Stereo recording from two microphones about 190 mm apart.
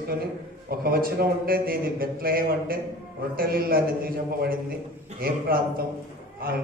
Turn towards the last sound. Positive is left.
turn(degrees=-50)  # may be behind; listen again after turning